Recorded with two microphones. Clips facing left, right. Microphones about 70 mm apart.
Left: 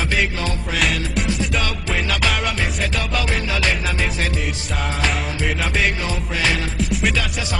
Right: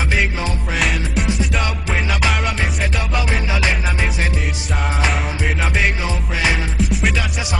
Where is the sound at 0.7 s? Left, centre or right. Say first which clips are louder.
Right 1 dB; centre.